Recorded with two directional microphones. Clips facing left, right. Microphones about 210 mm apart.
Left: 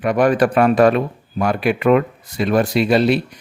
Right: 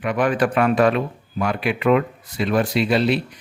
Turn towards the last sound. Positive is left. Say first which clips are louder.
# left 4 dB
turn(degrees=45)  # may be behind; listen again after turning